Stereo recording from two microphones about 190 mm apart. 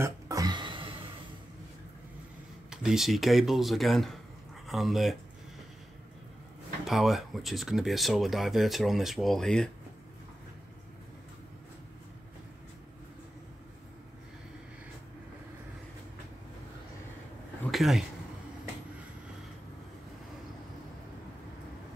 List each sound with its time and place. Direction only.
0.0 s a sound: 20° right (ahead or behind)
2.7 s speech: 5° right (ahead or behind)
6.9 s speech: centre (ahead or behind)
17.6 s speech: centre (ahead or behind)